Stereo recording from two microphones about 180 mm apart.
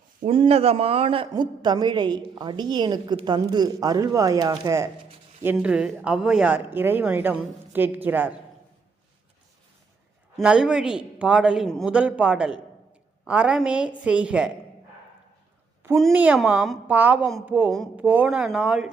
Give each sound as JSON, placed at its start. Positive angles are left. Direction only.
{"t": 0.3, "sound": "a woman's voice", "side_deg": -30}
{"t": 10.3, "sound": "a man's voice", "side_deg": -5}
{"t": 16.0, "sound": "a woman's voice", "side_deg": -5}